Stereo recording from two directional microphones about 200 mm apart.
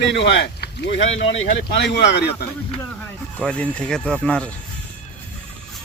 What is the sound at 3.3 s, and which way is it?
Speech, 5° left (ahead or behind).